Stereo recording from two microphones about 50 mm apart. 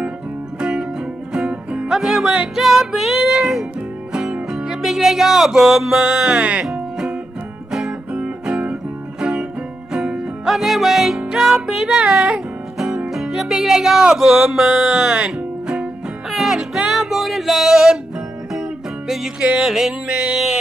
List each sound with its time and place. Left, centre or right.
0.6 s music: centre
1.9 s music: centre
2.3 s music: centre
2.6 s music: centre; by 6.6 s right
6.6 s music: centre
16.3 s music: centre
20.1 s music: right